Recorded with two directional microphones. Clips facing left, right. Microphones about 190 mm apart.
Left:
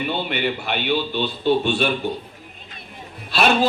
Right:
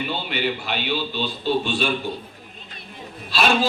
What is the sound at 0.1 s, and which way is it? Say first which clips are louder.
A man's voice: left 2 dB; 55° left (ahead or behind).